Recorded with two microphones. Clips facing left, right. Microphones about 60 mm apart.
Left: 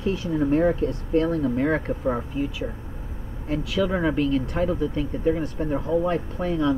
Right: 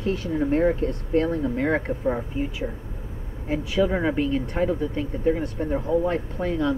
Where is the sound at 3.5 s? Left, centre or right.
Centre.